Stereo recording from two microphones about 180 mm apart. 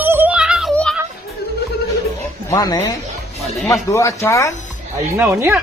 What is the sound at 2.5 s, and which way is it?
Speech, 20° left (ahead or behind).